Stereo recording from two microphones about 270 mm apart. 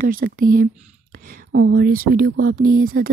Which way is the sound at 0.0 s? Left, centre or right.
Right.